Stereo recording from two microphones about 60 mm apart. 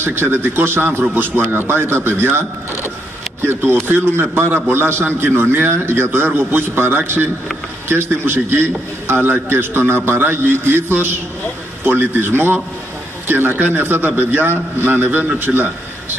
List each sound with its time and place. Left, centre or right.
0.0 s a man's voice: right
3.8 s a man's voice: right